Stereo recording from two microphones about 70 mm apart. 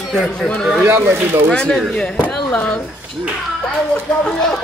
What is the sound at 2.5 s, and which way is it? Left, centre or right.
Speech, centre.